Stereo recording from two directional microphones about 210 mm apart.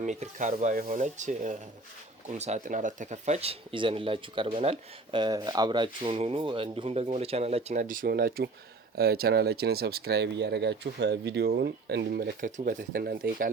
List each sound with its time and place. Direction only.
0.0 s speech: 35° right (ahead or behind)